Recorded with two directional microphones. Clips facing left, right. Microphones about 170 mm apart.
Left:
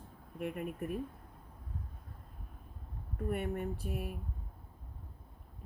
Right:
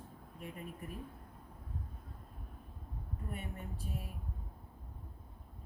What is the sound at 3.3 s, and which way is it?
Speech, 65° left (ahead or behind).